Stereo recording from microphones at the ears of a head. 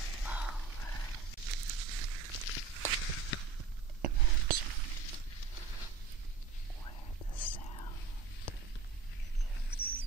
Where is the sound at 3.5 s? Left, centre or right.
Right.